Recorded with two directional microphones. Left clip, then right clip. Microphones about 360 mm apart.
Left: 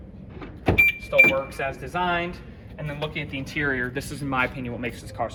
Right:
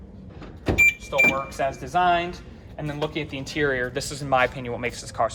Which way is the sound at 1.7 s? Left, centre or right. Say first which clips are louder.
Right 7 dB; right.